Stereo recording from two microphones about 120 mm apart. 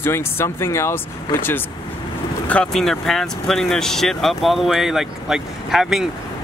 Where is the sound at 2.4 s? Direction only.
10° left (ahead or behind).